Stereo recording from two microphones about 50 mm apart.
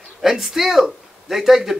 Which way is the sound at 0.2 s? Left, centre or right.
Centre.